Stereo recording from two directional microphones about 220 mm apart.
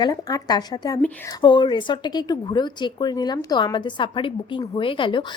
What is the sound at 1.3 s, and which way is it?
A woman's voice, 20° left (ahead or behind).